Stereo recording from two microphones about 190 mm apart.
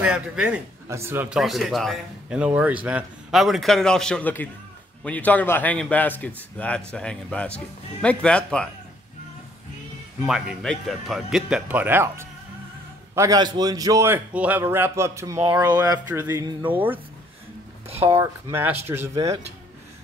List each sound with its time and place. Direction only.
0.0 s a man's voice: 5° right (ahead or behind)
10.2 s a man's voice: centre (ahead or behind)
18.0 s a man's voice: 10° right (ahead or behind)